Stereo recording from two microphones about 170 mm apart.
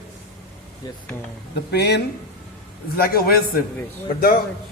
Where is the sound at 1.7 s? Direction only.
75° left (ahead or behind).